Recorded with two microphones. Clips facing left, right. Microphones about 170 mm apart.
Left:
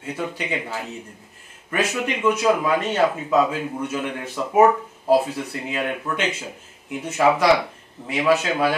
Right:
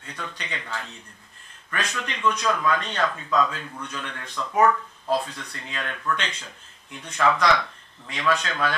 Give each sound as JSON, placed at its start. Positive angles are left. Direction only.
{"t": 0.0, "sound": "speech", "side_deg": 10}
{"t": 4.5, "sound": "speech", "side_deg": 25}
{"t": 5.1, "sound": "speech", "side_deg": 10}